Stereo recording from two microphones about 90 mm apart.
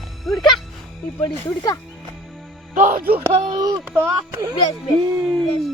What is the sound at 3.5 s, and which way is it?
Music, 45° right (ahead or behind).